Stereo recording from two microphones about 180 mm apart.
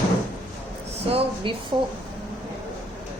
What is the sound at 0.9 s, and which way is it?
Speech, 30° right (ahead or behind).